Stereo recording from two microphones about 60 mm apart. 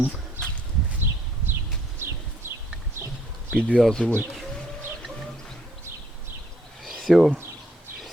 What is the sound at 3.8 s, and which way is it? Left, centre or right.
Speech, centre.